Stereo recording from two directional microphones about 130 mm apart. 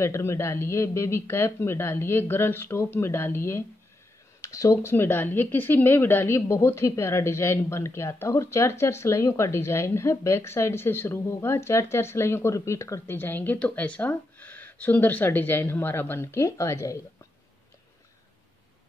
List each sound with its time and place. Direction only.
0.0 s speech: 20° left (ahead or behind)